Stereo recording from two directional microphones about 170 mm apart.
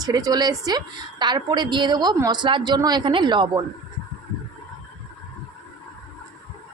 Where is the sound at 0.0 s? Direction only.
20° right (ahead or behind).